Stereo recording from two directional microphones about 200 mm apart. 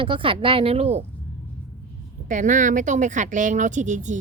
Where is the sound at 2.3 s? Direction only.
40° right (ahead or behind).